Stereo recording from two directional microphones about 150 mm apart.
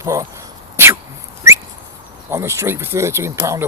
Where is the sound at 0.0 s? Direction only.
20° right (ahead or behind).